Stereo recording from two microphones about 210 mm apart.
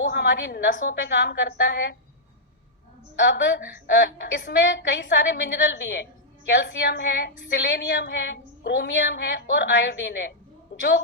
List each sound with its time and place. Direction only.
0.1 s a woman's voice: 55° left (ahead or behind)
3.2 s a woman's voice: 55° left (ahead or behind)